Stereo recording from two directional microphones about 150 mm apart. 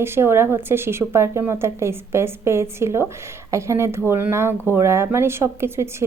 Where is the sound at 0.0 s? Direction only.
15° right (ahead or behind).